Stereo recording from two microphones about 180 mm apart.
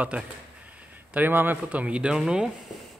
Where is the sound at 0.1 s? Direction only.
5° right (ahead or behind).